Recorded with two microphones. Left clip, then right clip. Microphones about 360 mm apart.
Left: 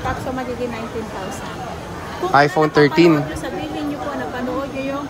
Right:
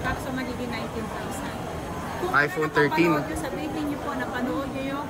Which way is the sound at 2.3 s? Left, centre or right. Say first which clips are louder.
Left 9 dB; centre.